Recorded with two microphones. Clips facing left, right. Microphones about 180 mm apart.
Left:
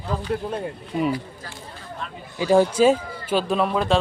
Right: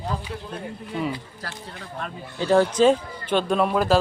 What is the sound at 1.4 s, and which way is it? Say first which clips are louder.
Speech: right 3 dB; 75° right (ahead or behind).